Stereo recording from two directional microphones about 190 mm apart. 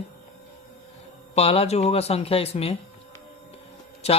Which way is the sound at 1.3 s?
30° left (ahead or behind).